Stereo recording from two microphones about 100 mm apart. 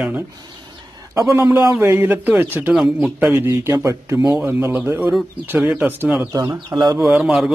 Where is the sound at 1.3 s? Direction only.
30° right (ahead or behind); by 3.5 s 15° right (ahead or behind).